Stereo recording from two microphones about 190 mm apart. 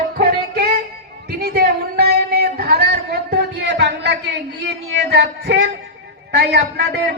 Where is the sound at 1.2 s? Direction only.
55° right (ahead or behind).